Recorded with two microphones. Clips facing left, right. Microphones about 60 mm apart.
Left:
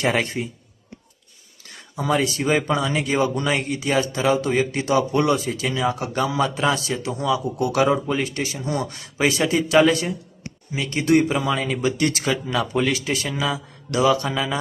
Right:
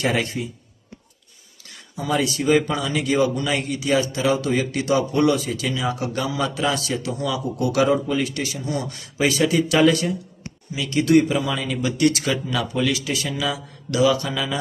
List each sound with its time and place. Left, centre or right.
0.0 s speech: left
1.6 s speech: left
13.9 s mantra: left